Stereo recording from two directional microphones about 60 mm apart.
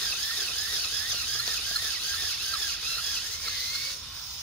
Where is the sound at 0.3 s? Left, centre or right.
Centre.